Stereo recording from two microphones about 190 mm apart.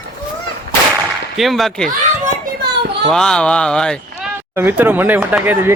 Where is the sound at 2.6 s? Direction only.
60° right (ahead or behind).